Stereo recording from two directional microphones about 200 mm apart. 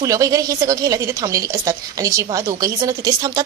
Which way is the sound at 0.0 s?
15° right (ahead or behind).